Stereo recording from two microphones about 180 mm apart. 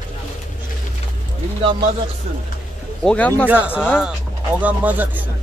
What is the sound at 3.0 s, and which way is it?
Speech, 10° left (ahead or behind).